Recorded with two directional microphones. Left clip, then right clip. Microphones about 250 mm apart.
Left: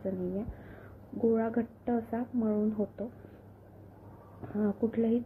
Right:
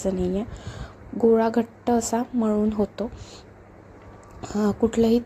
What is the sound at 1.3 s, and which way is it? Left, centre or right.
A woman's voice, right.